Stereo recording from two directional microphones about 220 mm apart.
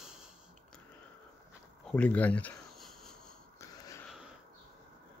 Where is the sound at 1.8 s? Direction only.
5° left (ahead or behind).